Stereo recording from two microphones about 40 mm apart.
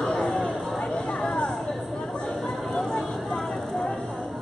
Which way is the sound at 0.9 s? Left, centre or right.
Centre.